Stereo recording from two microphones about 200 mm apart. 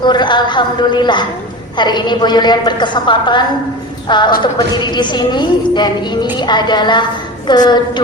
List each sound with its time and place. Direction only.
0.0 s a woman's voice: 20° left (ahead or behind)